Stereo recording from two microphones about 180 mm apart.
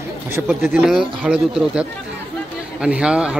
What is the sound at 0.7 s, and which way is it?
Speech, 5° right (ahead or behind).